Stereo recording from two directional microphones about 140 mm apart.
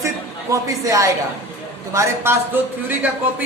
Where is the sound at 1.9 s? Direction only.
20° right (ahead or behind).